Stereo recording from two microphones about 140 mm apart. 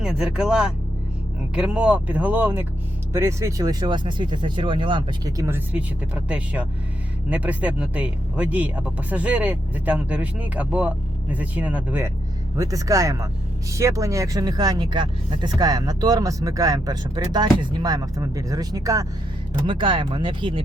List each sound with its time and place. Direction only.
0.0 s speech: 5° right (ahead or behind); by 5.3 s 35° right (ahead or behind)
5.4 s speech: 15° right (ahead or behind)
12.5 s speech: 25° right (ahead or behind)
19.6 s speech: 40° right (ahead or behind)